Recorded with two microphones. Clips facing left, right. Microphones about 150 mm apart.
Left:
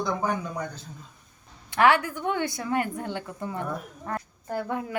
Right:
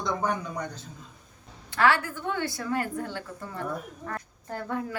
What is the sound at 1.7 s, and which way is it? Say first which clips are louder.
A woman's voice: left 3 dB; 15° left (ahead or behind).